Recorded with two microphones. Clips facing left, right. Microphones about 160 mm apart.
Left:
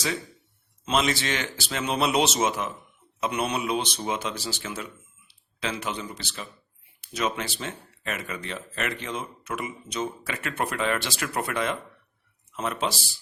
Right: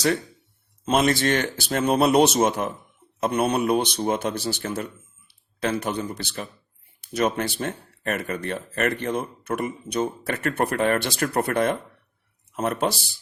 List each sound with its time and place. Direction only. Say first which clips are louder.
0.9 s speech: right 5 dB; 50° right (ahead or behind)